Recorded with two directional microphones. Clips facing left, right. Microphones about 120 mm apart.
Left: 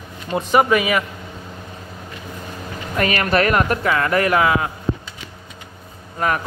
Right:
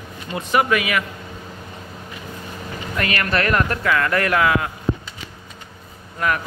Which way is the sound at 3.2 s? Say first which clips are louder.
Left 3 dB; 15° left (ahead or behind).